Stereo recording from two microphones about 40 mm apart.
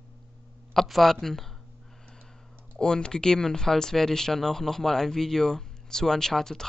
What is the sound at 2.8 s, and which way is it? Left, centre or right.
Speech, centre.